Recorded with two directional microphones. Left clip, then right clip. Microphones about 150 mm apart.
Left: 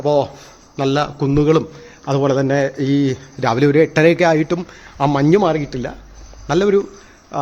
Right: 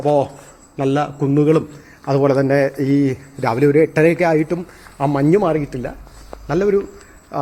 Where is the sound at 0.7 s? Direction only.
15° left (ahead or behind).